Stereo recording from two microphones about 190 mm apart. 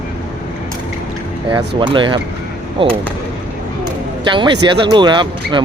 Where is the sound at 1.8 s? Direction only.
25° right (ahead or behind).